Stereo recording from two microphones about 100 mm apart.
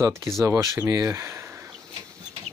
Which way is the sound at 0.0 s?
30° right (ahead or behind).